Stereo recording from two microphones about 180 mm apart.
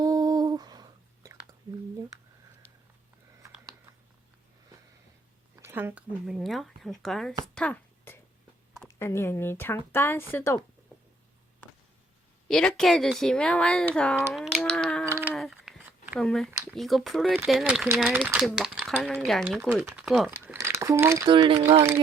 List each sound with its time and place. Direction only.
0.0 s humming: 20° right (ahead or behind)
5.6 s speech: 10° right (ahead or behind)
7.5 s a sound: 10° left (ahead or behind)
8.9 s speech: 15° left (ahead or behind)
12.5 s speech: 5° left (ahead or behind)
15.0 s a sound: 15° right (ahead or behind)
15.3 s a sound: centre (ahead or behind)
16.2 s speech: 5° left (ahead or behind)
19.5 s speech: 10° right (ahead or behind)
20.3 s crumpling: 10° right (ahead or behind)
21.3 s speech: 30° right (ahead or behind)